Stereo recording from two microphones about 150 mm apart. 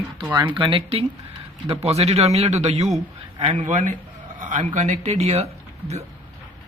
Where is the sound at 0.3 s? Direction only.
15° right (ahead or behind).